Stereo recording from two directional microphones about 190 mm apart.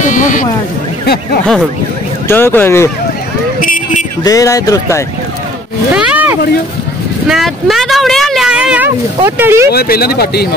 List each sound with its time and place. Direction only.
0.0 s a sound: 45° left (ahead or behind)
1.0 s speech: 55° left (ahead or behind)
2.2 s speech: 10° left (ahead or behind)
3.6 s a sound: 45° left (ahead or behind)
4.2 s speech: 20° left (ahead or behind)
5.9 s speech: 5° right (ahead or behind)
9.7 s speech: 55° left (ahead or behind)